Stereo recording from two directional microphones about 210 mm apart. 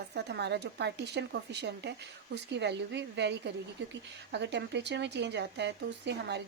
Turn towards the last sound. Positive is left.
turn(degrees=-55)  # may be behind; listen again after turning